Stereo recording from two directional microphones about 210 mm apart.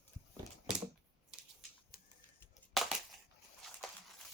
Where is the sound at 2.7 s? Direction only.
Centre (ahead or behind).